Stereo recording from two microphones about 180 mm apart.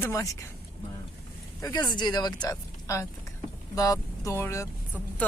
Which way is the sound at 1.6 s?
20° left (ahead or behind).